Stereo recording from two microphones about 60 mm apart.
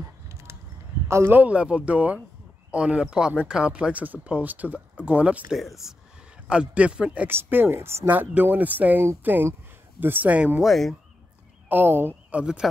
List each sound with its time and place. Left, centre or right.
0.3 s a sound: right
1.2 s speech: right
1.5 s speech: centre
5.8 s speech: centre
7.2 s speech: right
8.1 s speech: right
10.6 s speech: centre
11.7 s speech: right